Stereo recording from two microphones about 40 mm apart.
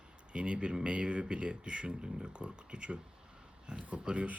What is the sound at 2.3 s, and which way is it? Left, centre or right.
Speech, right.